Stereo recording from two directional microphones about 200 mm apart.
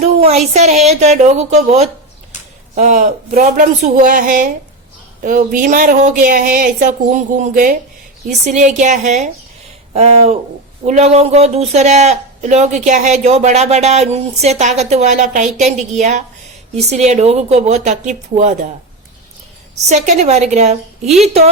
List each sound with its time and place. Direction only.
0.0 s speech: 30° right (ahead or behind)
19.9 s speech: 35° right (ahead or behind)